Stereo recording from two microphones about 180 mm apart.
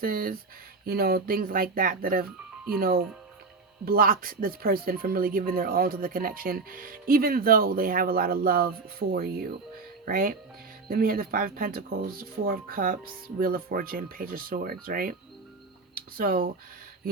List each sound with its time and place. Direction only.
0.0 s speech: 55° right (ahead or behind)